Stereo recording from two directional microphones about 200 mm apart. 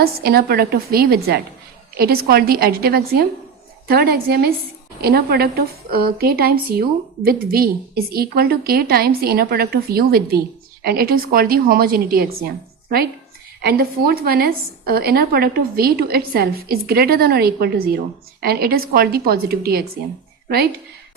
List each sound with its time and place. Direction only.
0.0 s a woman's voice: 50° right (ahead or behind)
13.6 s a woman's voice: 50° right (ahead or behind)